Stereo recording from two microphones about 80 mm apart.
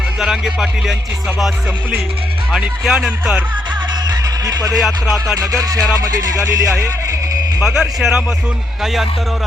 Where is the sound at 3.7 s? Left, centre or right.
Right.